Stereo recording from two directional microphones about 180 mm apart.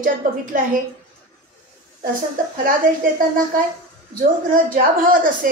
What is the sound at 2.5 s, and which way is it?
Speech, 50° right (ahead or behind).